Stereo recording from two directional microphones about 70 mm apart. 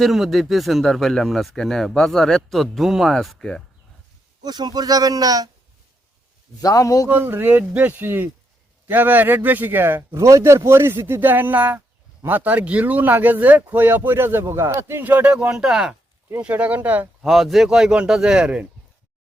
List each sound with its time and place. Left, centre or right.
0.0 s speech: centre
4.4 s speech: right
6.6 s a man's voice: left
7.1 s speech: right
10.2 s speech: right; by 16.0 s centre
16.4 s speech: centre
17.2 s a man's voice: centre